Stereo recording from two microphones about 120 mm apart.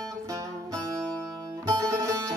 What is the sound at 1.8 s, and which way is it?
Music, 25° right (ahead or behind).